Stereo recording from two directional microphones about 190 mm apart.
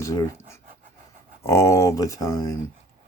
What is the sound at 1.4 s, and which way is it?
Speech, 15° left (ahead or behind).